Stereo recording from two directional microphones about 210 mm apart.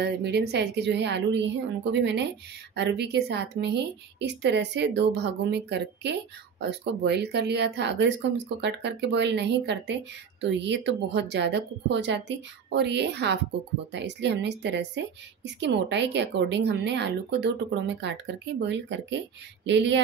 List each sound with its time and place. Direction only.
0.0 s a woman's voice: 55° right (ahead or behind)